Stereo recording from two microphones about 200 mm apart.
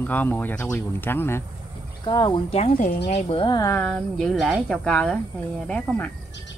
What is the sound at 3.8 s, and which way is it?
Speech, 5° left (ahead or behind).